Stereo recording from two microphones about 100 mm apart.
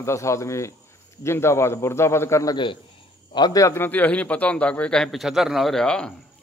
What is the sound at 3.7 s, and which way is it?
A man's voice, 20° left (ahead or behind).